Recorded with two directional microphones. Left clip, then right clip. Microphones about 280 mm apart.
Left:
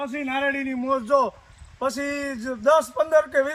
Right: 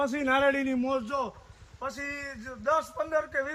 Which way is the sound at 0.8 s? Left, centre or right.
Centre.